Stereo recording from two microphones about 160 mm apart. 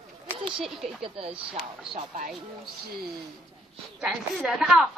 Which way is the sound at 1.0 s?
35° right (ahead or behind).